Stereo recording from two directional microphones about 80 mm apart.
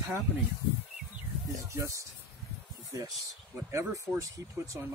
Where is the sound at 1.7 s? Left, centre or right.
Right.